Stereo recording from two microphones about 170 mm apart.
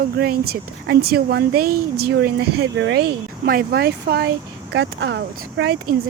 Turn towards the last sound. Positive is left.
turn(degrees=-75)  # may be behind; listen again after turning